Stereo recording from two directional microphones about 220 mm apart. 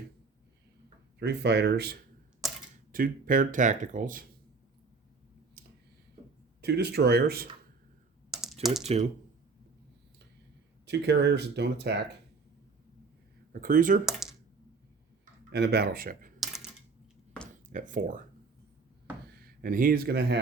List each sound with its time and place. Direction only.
1.2 s speech: 50° right (ahead or behind)
6.6 s speech: 50° right (ahead or behind)
8.3 s typing: centre (ahead or behind)
8.8 s speech: 30° right (ahead or behind)
10.8 s speech: 50° right (ahead or behind)
13.5 s speech: 40° right (ahead or behind)
14.0 s a sound: centre (ahead or behind)
15.5 s speech: 50° right (ahead or behind)
17.7 s speech: 35° right (ahead or behind)
19.4 s speech: 40° right (ahead or behind)